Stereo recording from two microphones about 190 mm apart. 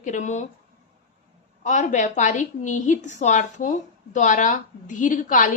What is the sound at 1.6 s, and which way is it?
A woman's voice, 40° left (ahead or behind).